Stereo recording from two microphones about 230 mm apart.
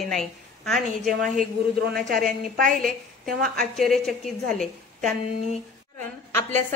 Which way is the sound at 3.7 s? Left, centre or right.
Centre.